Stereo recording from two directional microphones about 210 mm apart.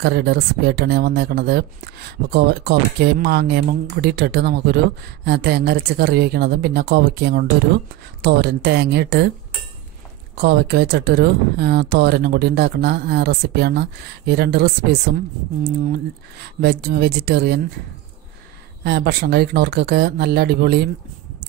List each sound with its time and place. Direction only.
0.0 s speech: 50° right (ahead or behind)
10.4 s speech: 50° right (ahead or behind)
16.6 s speech: 50° right (ahead or behind)
18.9 s speech: 50° right (ahead or behind)